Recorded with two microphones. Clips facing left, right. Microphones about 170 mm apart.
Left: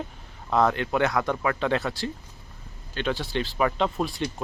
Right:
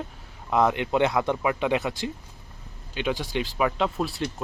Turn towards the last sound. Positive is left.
turn(degrees=0)  # may be behind; listen again after turning